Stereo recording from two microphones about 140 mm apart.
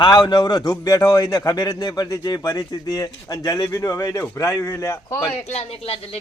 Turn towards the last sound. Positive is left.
turn(degrees=45)  # may be behind; listen again after turning